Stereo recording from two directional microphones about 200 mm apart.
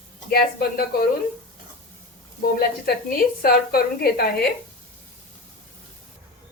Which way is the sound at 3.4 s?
50° left (ahead or behind).